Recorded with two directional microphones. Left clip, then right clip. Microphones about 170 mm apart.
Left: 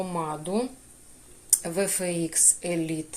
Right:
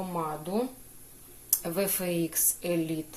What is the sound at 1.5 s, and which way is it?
Speech, centre (ahead or behind).